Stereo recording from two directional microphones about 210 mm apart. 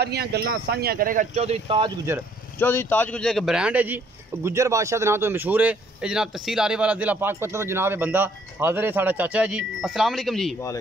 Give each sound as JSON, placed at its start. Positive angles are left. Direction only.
{"t": 0.0, "sound": "speech", "side_deg": -50}
{"t": 2.1, "sound": "speech", "side_deg": -10}
{"t": 2.6, "sound": "speech", "side_deg": 10}